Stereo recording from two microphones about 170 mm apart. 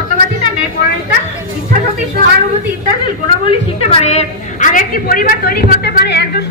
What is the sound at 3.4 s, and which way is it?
A woman's voice, 35° left (ahead or behind).